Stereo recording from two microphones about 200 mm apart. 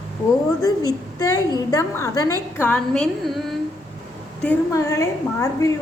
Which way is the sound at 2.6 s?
5° left (ahead or behind).